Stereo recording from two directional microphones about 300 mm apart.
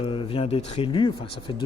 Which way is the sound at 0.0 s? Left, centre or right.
Centre.